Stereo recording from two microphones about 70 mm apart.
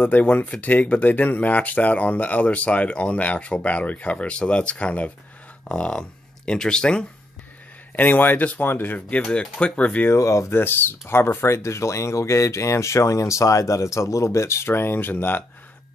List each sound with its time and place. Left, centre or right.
0.0 s speech: left
7.9 s speech: left
10.1 s speech: left
10.5 s speech: left